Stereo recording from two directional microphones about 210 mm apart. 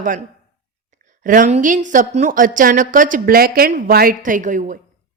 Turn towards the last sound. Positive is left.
turn(degrees=-35)  # may be behind; listen again after turning